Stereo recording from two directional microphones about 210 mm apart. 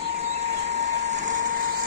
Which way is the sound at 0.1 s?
30° right (ahead or behind).